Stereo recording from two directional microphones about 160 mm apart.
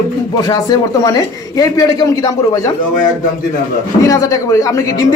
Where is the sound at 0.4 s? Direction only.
25° left (ahead or behind).